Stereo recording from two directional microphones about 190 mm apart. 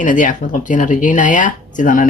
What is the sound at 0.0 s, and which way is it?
Speech, 45° left (ahead or behind).